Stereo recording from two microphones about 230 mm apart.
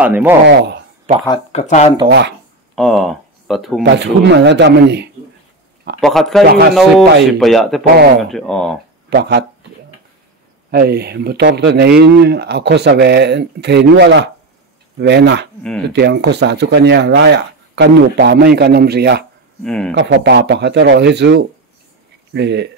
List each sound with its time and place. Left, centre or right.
0.0 s speech: centre
0.5 s a sound: right
1.2 s speech: centre
1.6 s speech: left
2.0 s speech: right
2.7 s speech: centre
3.8 s speech: right
5.9 s speech: centre
6.4 s speech: right
6.7 s speech: centre
9.1 s speech: right
10.7 s speech: right
19.6 s speech: centre
20.0 s speech: right